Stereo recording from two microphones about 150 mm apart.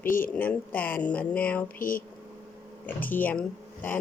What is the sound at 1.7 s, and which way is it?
Speech, 70° left (ahead or behind).